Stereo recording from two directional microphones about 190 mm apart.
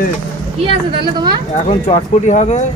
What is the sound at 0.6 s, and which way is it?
Speech, 25° right (ahead or behind).